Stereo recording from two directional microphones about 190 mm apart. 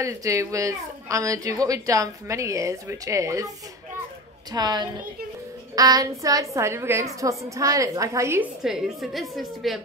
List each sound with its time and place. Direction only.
0.0 s a woman's voice: 15° right (ahead or behind)
8.6 s a woman's voice: centre (ahead or behind)